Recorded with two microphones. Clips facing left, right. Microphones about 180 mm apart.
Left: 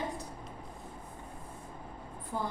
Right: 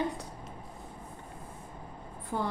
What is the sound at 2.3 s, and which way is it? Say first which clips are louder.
Child singing: right 3 dB; 65° right (ahead or behind).